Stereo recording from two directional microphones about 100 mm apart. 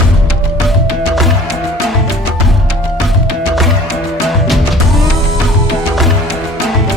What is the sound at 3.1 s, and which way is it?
Music, centre (ahead or behind).